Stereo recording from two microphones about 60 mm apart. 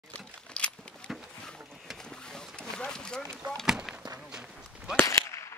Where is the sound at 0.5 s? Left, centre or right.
Centre.